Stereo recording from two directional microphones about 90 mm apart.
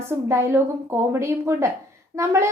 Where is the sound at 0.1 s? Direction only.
30° right (ahead or behind).